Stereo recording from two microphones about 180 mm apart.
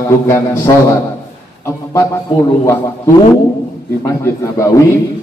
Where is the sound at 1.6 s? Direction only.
15° left (ahead or behind).